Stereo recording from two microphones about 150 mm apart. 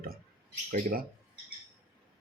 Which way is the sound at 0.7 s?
60° right (ahead or behind).